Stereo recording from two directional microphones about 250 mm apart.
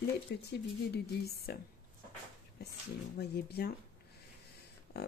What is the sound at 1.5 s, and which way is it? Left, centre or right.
Speech, left.